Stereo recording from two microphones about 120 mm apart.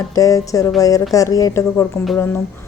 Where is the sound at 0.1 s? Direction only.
30° left (ahead or behind).